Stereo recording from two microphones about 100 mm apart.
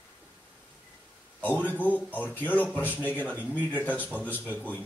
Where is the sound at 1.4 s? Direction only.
20° left (ahead or behind).